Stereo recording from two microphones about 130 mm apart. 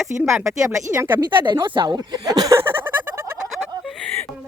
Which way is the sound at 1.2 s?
35° right (ahead or behind).